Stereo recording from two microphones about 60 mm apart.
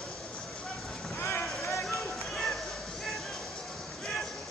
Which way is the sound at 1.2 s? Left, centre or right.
Left.